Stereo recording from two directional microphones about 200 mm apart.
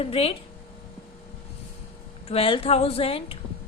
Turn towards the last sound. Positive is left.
turn(degrees=30)  # may be behind; listen again after turning